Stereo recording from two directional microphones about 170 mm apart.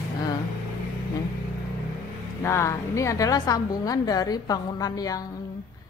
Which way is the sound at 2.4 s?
15° left (ahead or behind).